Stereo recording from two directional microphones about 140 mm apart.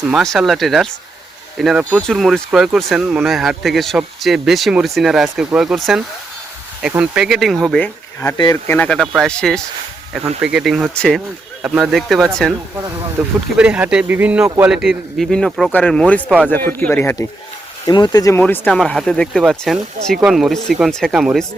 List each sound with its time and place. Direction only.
0.1 s speech: centre (ahead or behind)
11.6 s speech: 5° right (ahead or behind); by 17.2 s 15° left (ahead or behind)
17.8 s speech: 30° left (ahead or behind)
18.3 s speech: 15° left (ahead or behind); by 21.4 s 5° right (ahead or behind)